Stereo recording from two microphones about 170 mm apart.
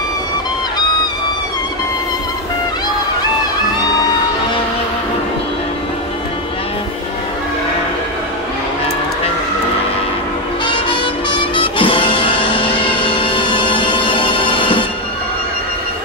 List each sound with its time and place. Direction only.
10.7 s music: 30° left (ahead or behind)